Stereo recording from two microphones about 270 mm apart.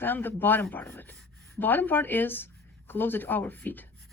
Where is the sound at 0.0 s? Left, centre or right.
Centre.